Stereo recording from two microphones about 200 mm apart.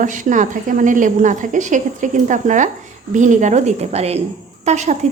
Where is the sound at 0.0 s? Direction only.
40° right (ahead or behind).